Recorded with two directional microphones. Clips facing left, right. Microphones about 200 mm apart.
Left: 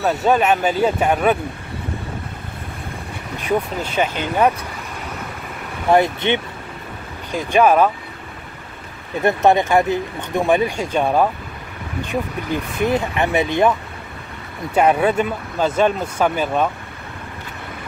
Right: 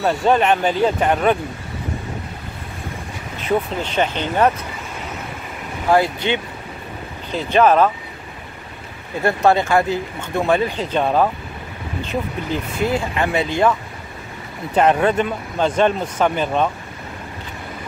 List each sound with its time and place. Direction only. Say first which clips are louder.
0.0 s speech: even; 5° left (ahead or behind)
3.4 s speech: right 1 dB; 10° left (ahead or behind)
5.9 s speech: left 1 dB; 20° left (ahead or behind)
9.2 s speech: left 1 dB; 20° left (ahead or behind)